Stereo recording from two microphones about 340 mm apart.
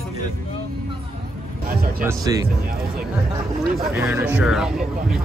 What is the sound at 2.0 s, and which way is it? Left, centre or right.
Speech, centre.